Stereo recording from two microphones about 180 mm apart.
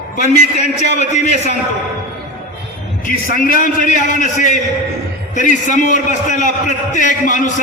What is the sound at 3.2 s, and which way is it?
A man's voice, 50° left (ahead or behind).